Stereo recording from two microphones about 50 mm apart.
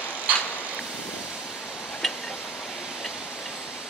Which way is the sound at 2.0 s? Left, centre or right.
Centre.